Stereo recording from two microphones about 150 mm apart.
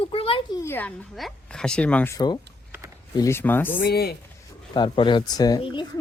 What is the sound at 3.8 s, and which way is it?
Speech, 90° left.